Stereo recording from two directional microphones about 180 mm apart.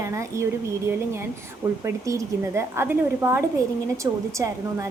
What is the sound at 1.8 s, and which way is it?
Speech, 15° right (ahead or behind).